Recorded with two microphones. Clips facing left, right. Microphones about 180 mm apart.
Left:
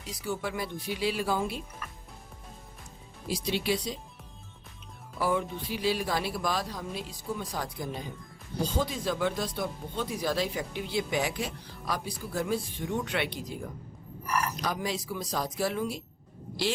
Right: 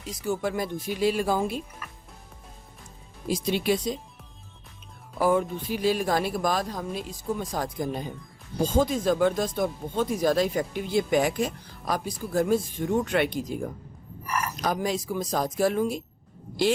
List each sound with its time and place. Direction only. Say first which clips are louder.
0.1 s speech: right 5 dB; 45° right (ahead or behind)
3.2 s speech: right 5 dB; 50° right (ahead or behind)
5.1 s speech: right 6 dB; 45° right (ahead or behind)